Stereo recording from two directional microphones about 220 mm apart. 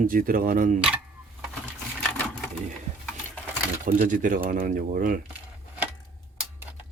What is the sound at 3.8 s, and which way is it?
Speech, 35° right (ahead or behind).